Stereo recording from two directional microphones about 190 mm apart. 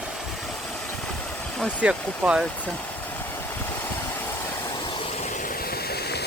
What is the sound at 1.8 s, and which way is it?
Speech, 5° right (ahead or behind).